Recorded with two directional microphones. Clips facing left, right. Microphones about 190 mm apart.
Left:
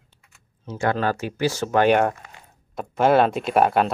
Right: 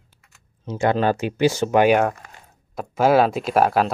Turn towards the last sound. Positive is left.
turn(degrees=0)  # may be behind; listen again after turning